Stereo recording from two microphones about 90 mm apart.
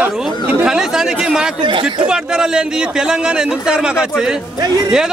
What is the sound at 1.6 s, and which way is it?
Speech, 65° right (ahead or behind).